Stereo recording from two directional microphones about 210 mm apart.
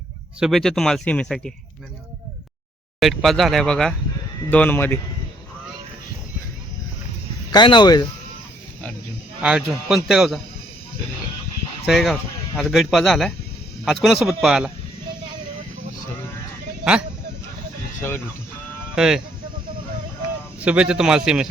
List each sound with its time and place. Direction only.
0.3 s speech: centre (ahead or behind)
3.0 s speech: centre (ahead or behind)
7.5 s speech: 20° left (ahead or behind)
9.4 s speech: 5° right (ahead or behind)
11.9 s speech: centre (ahead or behind)
18.9 s speech: 5° right (ahead or behind)
20.6 s speech: 5° right (ahead or behind)